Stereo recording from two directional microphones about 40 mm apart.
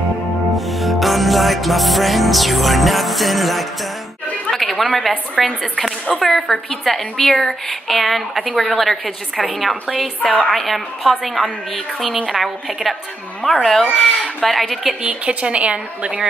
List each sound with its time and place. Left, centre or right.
0.6 s music: centre
4.5 s chatter: centre
5.4 s a woman's voice: centre
15.0 s a woman's voice: right